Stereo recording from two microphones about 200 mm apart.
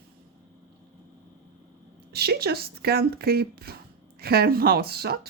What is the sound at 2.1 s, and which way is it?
Speech, 55° right (ahead or behind).